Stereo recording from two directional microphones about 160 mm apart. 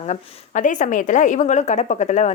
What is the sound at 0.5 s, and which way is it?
A woman's voice, 50° left (ahead or behind).